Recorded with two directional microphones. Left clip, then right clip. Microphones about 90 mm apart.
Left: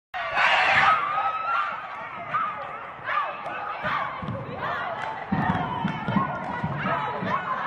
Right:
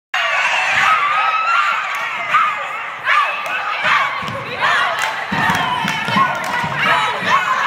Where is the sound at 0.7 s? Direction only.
20° right (ahead or behind).